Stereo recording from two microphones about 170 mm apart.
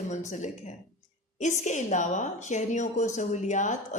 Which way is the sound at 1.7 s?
45° left (ahead or behind).